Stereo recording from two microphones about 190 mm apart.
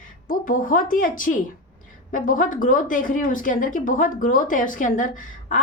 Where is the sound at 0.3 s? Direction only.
45° left (ahead or behind).